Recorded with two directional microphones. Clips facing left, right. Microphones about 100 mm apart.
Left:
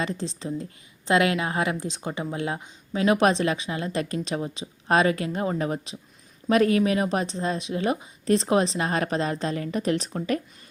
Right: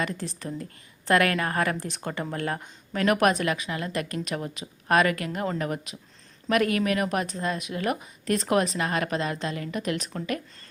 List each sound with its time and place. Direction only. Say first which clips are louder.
0.0 s a woman's voice: left 2 dB; 25° left (ahead or behind)